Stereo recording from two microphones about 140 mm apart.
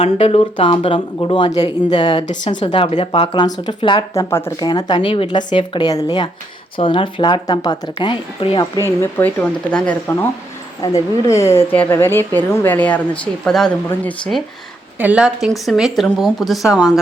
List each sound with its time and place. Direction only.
0.0 s speech: 45° left (ahead or behind)
4.1 s speech: 20° left (ahead or behind)
4.6 s speech: 30° left (ahead or behind)
8.8 s a woman's voice: 15° left (ahead or behind)
10.9 s a woman's voice: 20° left (ahead or behind); by 14.4 s 5° left (ahead or behind)
14.9 s a woman's voice: 10° right (ahead or behind)